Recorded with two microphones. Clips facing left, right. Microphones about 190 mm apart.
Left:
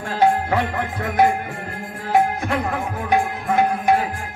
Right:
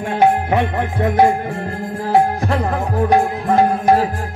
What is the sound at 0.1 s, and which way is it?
Music, 20° right (ahead or behind).